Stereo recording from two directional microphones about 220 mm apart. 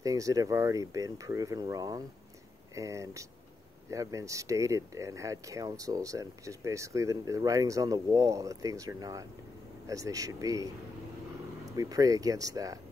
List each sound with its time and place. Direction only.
0.0 s speech: 15° right (ahead or behind)
11.7 s speech: 15° right (ahead or behind)